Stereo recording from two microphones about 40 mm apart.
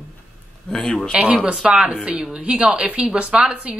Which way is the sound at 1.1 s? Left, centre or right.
Right.